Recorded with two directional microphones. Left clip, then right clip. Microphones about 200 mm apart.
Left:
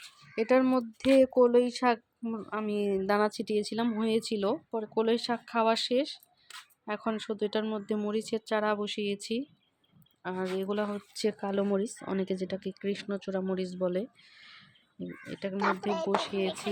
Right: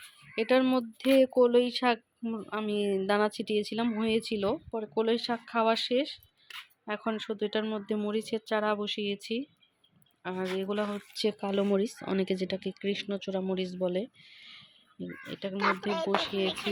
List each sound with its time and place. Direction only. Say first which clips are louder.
0.3 s speech: even; 5° left (ahead or behind)
15.5 s speech: right 1 dB; 50° left (ahead or behind)
16.1 s speech: right 1 dB; centre (ahead or behind)